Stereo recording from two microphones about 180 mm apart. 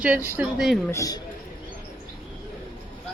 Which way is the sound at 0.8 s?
15° left (ahead or behind).